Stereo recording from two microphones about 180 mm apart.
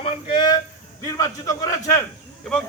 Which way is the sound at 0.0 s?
30° left (ahead or behind).